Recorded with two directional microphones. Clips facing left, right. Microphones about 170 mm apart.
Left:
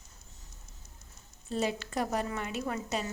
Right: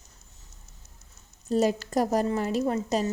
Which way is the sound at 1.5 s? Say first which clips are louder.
Right 8 dB; 40° right (ahead or behind).